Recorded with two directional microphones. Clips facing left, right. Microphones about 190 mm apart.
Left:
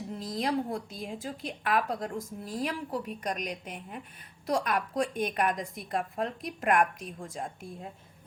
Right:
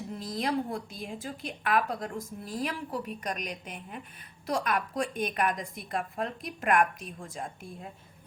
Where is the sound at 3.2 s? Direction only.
30° left (ahead or behind).